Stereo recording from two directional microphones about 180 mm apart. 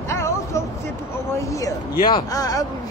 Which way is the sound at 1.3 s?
15° left (ahead or behind).